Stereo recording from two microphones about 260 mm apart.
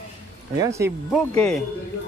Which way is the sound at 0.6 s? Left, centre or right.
Centre.